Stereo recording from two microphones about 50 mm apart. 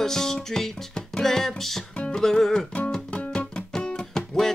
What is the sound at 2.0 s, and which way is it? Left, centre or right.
Music, centre.